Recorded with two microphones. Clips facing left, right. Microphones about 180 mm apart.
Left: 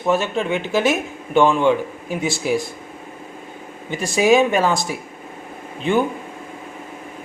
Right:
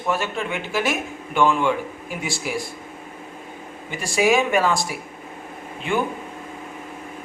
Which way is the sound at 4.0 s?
20° left (ahead or behind).